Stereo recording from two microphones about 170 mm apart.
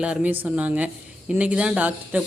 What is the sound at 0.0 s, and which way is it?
A woman's voice, 5° right (ahead or behind).